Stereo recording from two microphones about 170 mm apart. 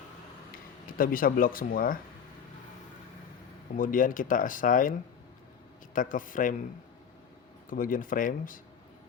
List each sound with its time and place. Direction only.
0.5 s speech: 55° left (ahead or behind)
3.8 s speech: 50° left (ahead or behind)
7.7 s speech: 55° left (ahead or behind)